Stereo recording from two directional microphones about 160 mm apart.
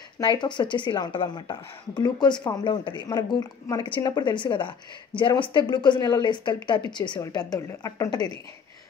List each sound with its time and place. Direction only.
0.2 s speech: 25° left (ahead or behind)